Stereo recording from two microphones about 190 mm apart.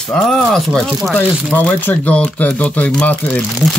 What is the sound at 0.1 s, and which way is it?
Speech, centre (ahead or behind).